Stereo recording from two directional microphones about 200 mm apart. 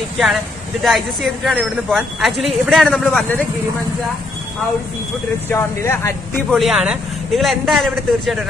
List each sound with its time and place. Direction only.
0.8 s a woman's voice: centre (ahead or behind)
5.5 s speech: 10° left (ahead or behind)
6.5 s a woman's voice: centre (ahead or behind)